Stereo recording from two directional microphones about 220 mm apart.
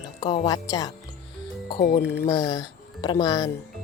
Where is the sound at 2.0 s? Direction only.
50° left (ahead or behind).